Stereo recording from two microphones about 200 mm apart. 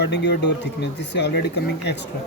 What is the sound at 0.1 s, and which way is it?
Speech, 60° left (ahead or behind).